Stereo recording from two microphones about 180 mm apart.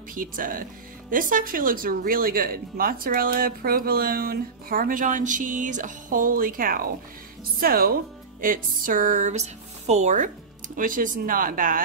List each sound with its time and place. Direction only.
0.1 s speech: 50° right (ahead or behind)